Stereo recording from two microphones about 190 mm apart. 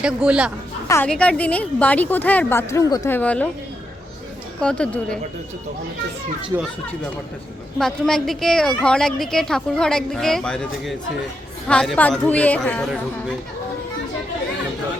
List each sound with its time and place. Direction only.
0.0 s a woman's voice: 5° right (ahead or behind)
0.9 s a woman's voice: 10° left (ahead or behind)
4.6 s a woman's voice: 5° left (ahead or behind)
6.5 s speech: 15° right (ahead or behind)
7.8 s a woman's voice: 5° left (ahead or behind)